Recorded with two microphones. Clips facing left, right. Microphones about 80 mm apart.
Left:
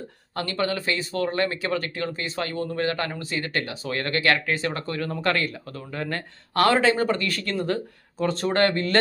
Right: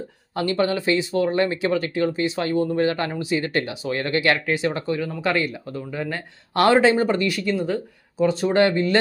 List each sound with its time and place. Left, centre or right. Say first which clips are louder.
0.3 s speech: right 5 dB; right
5.0 s speech: left 2 dB; centre
6.5 s speech: right 3 dB; right